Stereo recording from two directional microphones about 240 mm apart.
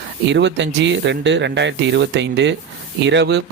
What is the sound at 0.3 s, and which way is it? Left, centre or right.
Speech, right.